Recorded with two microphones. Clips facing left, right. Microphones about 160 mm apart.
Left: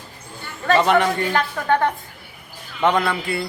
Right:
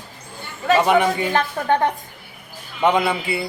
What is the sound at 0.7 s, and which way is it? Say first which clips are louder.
A man's voice: right 1 dB; 10° right (ahead or behind).